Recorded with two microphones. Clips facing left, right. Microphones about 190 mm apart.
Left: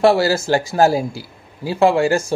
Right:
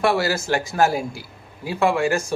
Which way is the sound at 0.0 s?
30° left (ahead or behind).